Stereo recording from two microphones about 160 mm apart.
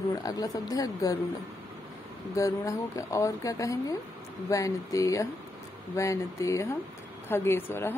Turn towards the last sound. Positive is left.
turn(degrees=15)  # may be behind; listen again after turning